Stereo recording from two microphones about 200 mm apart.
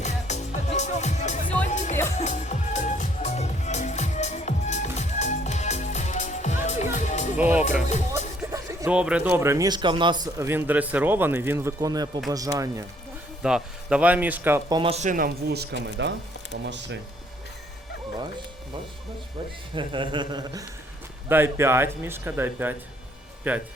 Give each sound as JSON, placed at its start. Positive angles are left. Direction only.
{"t": 0.0, "sound": "music", "side_deg": 35}
{"t": 1.6, "sound": "speech", "side_deg": 35}
{"t": 2.1, "sound": "music", "side_deg": 35}
{"t": 7.3, "sound": "speech", "side_deg": -10}
{"t": 7.9, "sound": "speech", "side_deg": 35}
{"t": 8.9, "sound": "speech", "side_deg": -5}
{"t": 13.4, "sound": "speech", "side_deg": -5}
{"t": 14.8, "sound": "speech", "side_deg": -30}
{"t": 19.7, "sound": "speech", "side_deg": -25}